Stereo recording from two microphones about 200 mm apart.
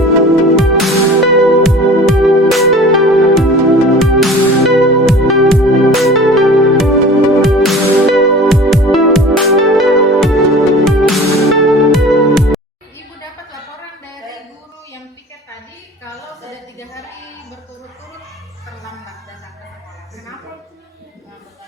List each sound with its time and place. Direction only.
0.0 s music: centre (ahead or behind)
16.5 s a sound: 15° left (ahead or behind)
18.8 s music: centre (ahead or behind)